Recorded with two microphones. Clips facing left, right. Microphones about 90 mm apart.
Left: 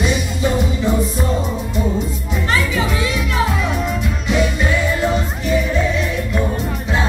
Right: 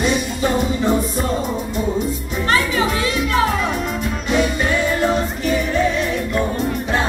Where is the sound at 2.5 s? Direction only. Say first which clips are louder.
Right 2 dB; 45° right (ahead or behind).